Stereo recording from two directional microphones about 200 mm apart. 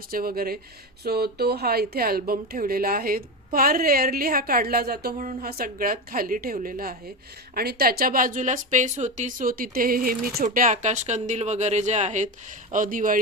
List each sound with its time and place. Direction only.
0.1 s speech: 45° right (ahead or behind)